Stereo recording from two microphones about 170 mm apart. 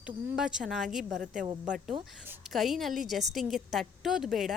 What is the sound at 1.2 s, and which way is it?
Speech, 50° right (ahead or behind).